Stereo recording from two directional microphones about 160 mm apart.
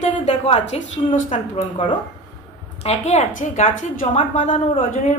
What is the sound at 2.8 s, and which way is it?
A woman's voice, 45° left (ahead or behind).